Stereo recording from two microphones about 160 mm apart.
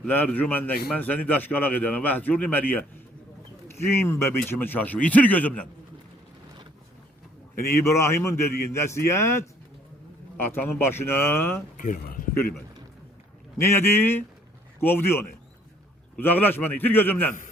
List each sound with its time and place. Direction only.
0.0 s a man's voice: 10° left (ahead or behind)
7.5 s a man's voice: 15° left (ahead or behind)
11.8 s speech: 60° left (ahead or behind)
13.6 s a man's voice: 15° left (ahead or behind)